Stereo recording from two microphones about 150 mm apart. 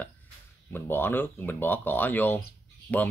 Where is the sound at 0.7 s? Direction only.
15° left (ahead or behind).